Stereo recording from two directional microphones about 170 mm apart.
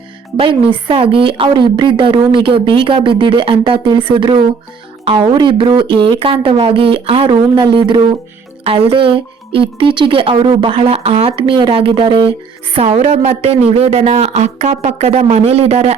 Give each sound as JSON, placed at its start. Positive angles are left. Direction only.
{"t": 0.3, "sound": "a woman's voice", "side_deg": -30}